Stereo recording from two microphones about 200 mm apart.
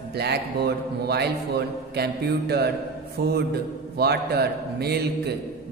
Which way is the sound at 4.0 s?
55° right (ahead or behind).